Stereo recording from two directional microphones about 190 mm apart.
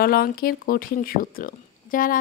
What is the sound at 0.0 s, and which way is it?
Speech, 50° left (ahead or behind).